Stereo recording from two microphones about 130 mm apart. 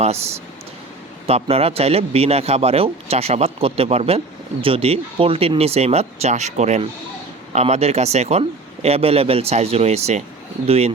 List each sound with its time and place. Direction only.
0.0 s a man's voice: 55° right (ahead or behind)